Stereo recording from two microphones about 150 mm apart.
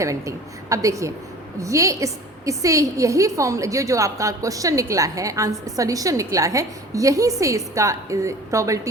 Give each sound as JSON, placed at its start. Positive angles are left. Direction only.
{"t": 0.0, "sound": "a woman's voice", "side_deg": -20}